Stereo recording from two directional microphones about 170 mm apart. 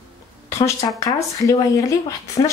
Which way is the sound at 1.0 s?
20° left (ahead or behind).